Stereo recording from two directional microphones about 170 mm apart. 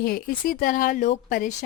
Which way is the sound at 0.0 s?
60° left (ahead or behind).